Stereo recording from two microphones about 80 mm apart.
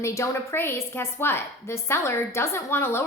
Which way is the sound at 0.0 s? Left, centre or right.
Left.